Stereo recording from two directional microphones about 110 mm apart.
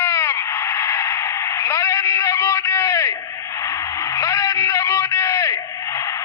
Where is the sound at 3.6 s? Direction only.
30° left (ahead or behind).